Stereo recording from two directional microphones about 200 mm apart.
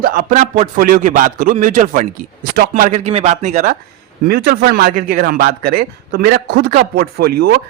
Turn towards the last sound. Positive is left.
turn(degrees=-50)  # may be behind; listen again after turning